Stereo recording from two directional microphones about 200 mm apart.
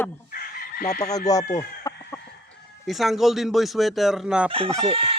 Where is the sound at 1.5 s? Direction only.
15° left (ahead or behind).